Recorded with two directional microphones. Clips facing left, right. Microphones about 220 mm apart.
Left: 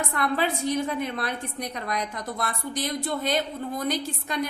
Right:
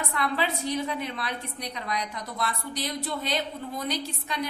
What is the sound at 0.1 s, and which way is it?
A woman's voice, 50° left (ahead or behind).